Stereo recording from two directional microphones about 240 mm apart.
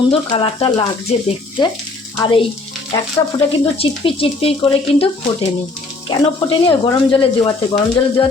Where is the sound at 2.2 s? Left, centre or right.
Left.